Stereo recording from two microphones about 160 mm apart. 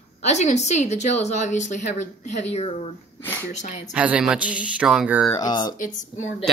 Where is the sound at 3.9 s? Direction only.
5° right (ahead or behind).